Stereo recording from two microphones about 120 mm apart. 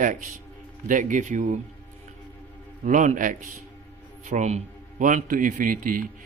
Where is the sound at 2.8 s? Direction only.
90° right.